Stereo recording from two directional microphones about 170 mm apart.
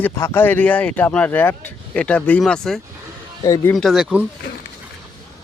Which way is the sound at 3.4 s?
20° left (ahead or behind).